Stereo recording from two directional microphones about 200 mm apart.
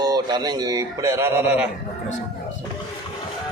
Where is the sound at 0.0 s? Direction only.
20° right (ahead or behind).